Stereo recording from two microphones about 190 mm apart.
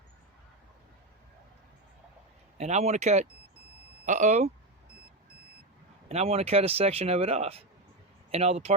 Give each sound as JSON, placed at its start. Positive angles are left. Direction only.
{"t": 2.6, "sound": "speech", "side_deg": -35}
{"t": 6.1, "sound": "speech", "side_deg": -35}